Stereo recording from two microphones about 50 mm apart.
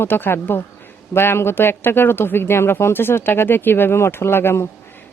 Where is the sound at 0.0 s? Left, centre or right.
Left.